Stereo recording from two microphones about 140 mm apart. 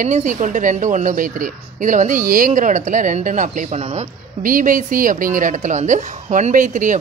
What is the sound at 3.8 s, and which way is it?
Speech, 45° right (ahead or behind).